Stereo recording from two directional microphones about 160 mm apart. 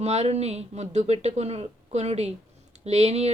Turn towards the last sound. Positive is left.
turn(degrees=-40)  # may be behind; listen again after turning